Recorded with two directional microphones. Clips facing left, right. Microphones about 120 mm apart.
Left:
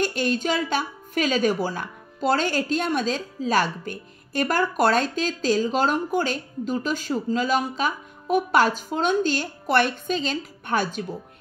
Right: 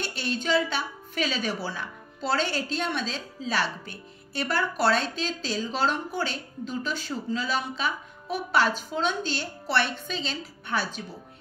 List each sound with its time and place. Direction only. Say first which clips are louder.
0.0 s a woman's voice: left 7 dB; 45° left (ahead or behind)